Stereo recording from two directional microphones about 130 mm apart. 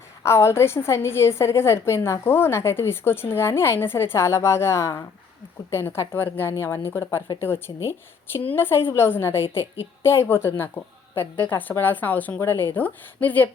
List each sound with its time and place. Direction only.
0.2 s a woman's voice: 20° left (ahead or behind)